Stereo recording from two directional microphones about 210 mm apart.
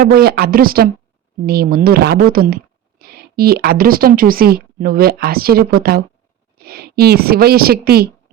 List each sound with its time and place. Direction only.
0.0 s a woman's voice: 45° right (ahead or behind)